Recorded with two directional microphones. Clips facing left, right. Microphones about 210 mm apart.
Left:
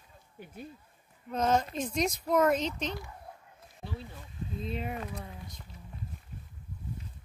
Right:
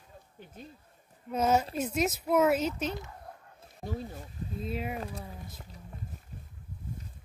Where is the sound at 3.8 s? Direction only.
45° right (ahead or behind).